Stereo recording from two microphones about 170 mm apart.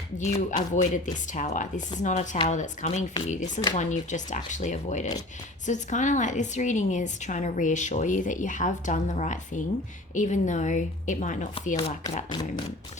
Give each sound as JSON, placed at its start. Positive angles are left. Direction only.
{"t": 0.2, "sound": "a woman's voice", "side_deg": 45}
{"t": 12.3, "sound": "speech", "side_deg": 25}